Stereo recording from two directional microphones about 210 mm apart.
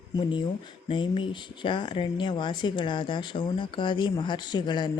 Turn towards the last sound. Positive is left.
turn(degrees=20)  # may be behind; listen again after turning